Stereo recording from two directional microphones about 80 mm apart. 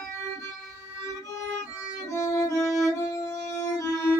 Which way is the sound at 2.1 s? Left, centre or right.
Left.